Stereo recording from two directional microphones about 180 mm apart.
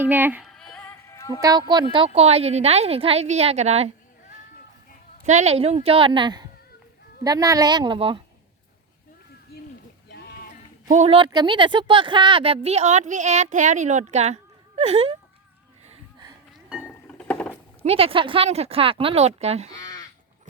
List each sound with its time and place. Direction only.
0.0 s speech: 10° right (ahead or behind)
0.4 s music: 5° left (ahead or behind)
1.4 s a woman's voice: 20° right (ahead or behind)
5.2 s a woman's voice: 40° right (ahead or behind)
10.8 s speech: 40° right (ahead or behind)
16.8 s a sound: 10° left (ahead or behind)
17.8 s speech: 30° right (ahead or behind)
19.8 s crow: 20° left (ahead or behind)